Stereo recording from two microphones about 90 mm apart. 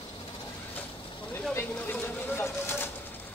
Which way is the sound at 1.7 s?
20° left (ahead or behind).